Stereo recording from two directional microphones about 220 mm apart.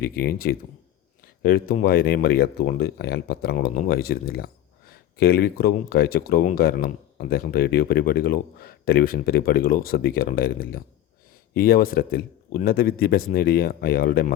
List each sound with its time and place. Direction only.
0.0 s speech: 45° left (ahead or behind)